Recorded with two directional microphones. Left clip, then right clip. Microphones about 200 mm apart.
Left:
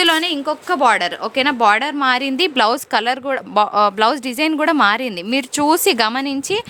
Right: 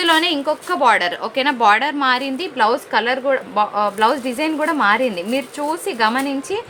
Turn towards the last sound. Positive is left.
turn(degrees=55)  # may be behind; listen again after turning